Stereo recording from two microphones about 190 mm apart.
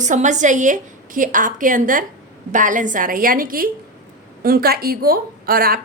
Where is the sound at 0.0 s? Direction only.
40° right (ahead or behind).